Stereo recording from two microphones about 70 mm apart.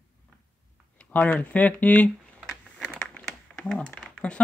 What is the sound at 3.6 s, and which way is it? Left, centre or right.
Speech, centre.